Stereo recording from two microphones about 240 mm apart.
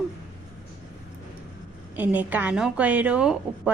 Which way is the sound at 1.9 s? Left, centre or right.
Centre.